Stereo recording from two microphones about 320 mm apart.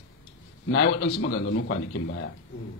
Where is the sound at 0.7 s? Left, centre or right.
Left.